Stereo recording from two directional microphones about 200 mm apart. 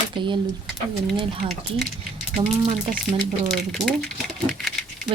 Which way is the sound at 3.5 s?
5° left (ahead or behind).